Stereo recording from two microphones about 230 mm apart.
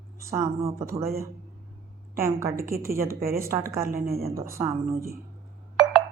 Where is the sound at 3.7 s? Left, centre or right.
Right.